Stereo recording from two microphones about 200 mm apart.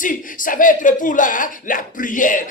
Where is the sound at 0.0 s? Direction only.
40° left (ahead or behind).